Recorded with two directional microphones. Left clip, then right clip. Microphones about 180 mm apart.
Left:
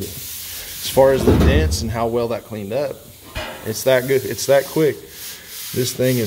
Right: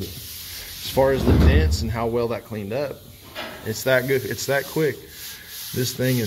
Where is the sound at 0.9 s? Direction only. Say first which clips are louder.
Left 6 dB; 20° left (ahead or behind).